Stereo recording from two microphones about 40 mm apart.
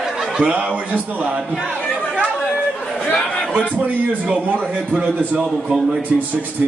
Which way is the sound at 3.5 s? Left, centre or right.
Right.